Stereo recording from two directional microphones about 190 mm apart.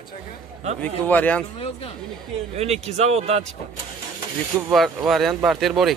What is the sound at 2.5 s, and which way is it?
Speech, 35° right (ahead or behind).